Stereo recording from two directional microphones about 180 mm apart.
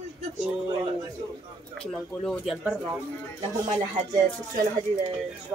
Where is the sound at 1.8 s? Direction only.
Centre (ahead or behind).